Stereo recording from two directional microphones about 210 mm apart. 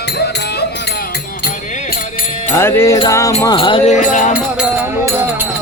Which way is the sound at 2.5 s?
10° left (ahead or behind).